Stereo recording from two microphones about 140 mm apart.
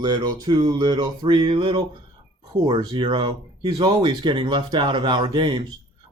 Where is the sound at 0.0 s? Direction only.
30° right (ahead or behind).